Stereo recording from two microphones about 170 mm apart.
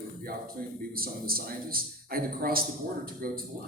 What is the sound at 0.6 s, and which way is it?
A man's voice, 60° right (ahead or behind).